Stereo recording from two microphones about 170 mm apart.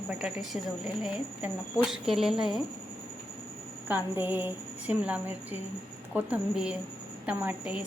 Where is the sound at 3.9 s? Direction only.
10° right (ahead or behind).